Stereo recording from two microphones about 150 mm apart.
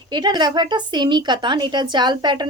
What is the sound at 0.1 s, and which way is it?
A woman's voice, 30° right (ahead or behind).